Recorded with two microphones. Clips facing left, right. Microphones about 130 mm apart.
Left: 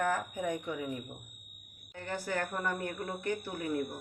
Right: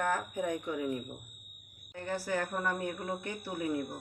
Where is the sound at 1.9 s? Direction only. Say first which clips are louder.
Right 2 dB; 5° right (ahead or behind).